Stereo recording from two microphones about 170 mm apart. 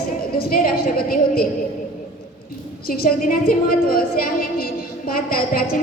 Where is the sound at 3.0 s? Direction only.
60° left (ahead or behind).